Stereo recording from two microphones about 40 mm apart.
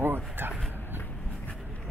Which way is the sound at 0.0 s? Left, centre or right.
Right.